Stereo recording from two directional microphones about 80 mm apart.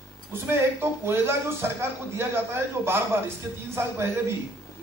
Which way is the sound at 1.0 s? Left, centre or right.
Right.